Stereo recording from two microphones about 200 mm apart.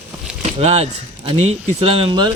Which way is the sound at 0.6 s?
35° right (ahead or behind).